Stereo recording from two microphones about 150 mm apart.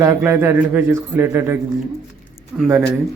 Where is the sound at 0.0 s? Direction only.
20° right (ahead or behind).